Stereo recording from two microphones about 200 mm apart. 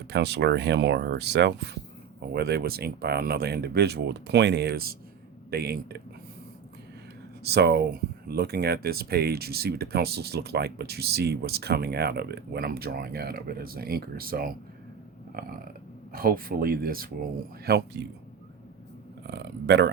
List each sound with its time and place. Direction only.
0.1 s speech: 55° right (ahead or behind)
7.4 s speech: 55° right (ahead or behind)
15.3 s burping: 45° right (ahead or behind)
16.1 s speech: 45° right (ahead or behind)
19.3 s speech: 60° right (ahead or behind)